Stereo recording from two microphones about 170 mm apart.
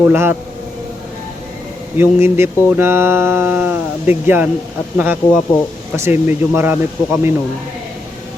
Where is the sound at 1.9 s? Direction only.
15° right (ahead or behind).